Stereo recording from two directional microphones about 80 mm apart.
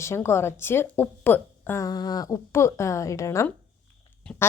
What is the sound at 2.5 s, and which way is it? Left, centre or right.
A woman's voice, left.